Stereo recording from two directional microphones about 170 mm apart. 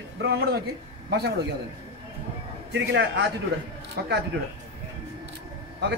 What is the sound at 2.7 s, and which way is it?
Speech, 90° right.